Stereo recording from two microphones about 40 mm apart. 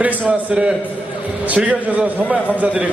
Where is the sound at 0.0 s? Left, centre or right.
Right.